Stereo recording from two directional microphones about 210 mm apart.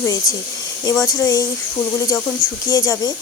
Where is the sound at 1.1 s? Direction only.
15° left (ahead or behind).